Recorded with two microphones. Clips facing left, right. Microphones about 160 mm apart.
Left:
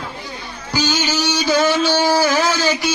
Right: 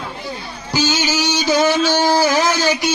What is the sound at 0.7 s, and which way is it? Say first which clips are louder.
Music: right 1 dB; 10° right (ahead or behind).